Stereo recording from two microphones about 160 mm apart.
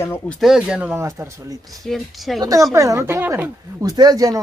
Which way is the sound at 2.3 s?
20° right (ahead or behind).